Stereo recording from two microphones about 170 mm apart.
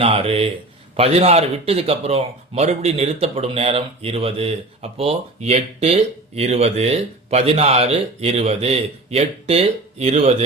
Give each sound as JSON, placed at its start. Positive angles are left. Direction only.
{"t": 0.0, "sound": "speech", "side_deg": -35}